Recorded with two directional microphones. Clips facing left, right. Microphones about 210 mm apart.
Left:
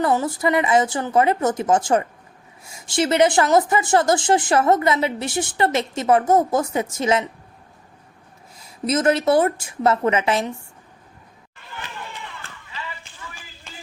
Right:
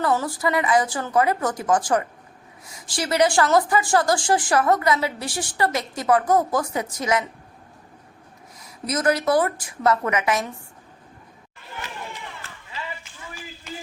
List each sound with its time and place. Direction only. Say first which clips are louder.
0.0 s a woman's voice: left 3 dB; 20° left (ahead or behind)
8.5 s a woman's voice: left 5 dB; 25° left (ahead or behind)